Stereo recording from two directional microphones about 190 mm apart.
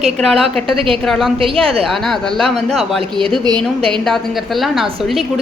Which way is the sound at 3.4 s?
25° right (ahead or behind).